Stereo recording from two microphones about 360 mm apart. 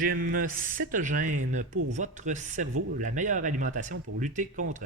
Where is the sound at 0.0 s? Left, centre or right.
Right.